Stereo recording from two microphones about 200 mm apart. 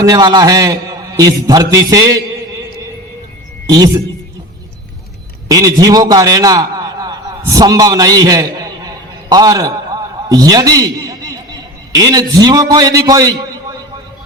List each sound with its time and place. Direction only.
0.0 s a man's voice: 20° right (ahead or behind)
3.7 s a man's voice: 20° right (ahead or behind)
5.5 s a man's voice: 15° right (ahead or behind)